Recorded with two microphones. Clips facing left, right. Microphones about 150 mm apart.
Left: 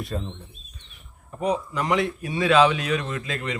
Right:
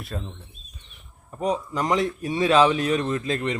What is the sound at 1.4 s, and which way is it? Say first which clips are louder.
Speech: even; 40° right (ahead or behind).